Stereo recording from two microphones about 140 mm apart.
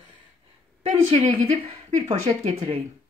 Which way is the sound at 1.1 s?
45° right (ahead or behind).